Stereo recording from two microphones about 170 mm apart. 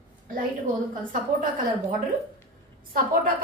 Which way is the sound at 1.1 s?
55° right (ahead or behind).